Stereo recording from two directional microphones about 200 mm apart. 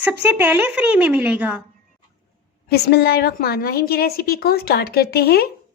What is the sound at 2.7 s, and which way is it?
Speech, 55° left (ahead or behind).